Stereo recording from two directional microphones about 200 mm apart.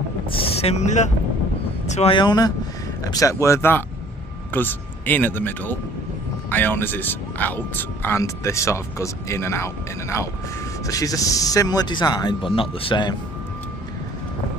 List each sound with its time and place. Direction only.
0.3 s speech: 30° left (ahead or behind)